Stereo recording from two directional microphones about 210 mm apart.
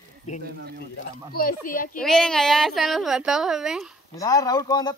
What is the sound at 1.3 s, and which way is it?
Speech, 45° left (ahead or behind).